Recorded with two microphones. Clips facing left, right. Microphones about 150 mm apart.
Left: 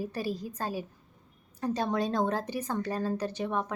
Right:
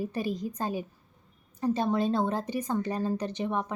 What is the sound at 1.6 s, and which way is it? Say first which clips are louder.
Speech: right 3 dB; 10° right (ahead or behind).